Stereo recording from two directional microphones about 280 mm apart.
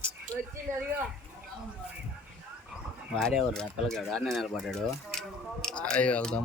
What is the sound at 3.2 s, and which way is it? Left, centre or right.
Speech, centre.